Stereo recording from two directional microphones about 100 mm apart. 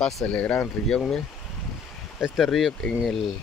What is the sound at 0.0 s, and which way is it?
Speech, 10° left (ahead or behind).